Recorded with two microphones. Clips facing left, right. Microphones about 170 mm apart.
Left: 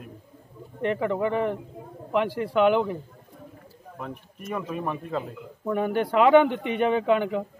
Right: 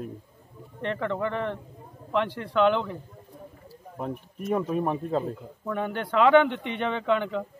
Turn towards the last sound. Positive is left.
turn(degrees=5)  # may be behind; listen again after turning